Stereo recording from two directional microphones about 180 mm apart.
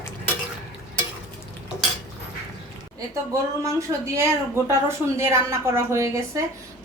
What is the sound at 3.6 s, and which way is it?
Speech, 15° right (ahead or behind).